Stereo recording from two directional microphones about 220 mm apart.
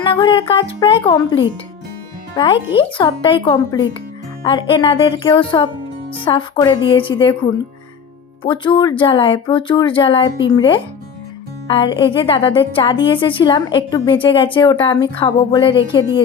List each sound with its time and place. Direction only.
0.0 s a woman's voice: 20° left (ahead or behind)
8.4 s a woman's voice: 20° left (ahead or behind)